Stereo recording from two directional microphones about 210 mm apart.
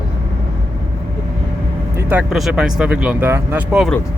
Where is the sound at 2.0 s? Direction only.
10° right (ahead or behind).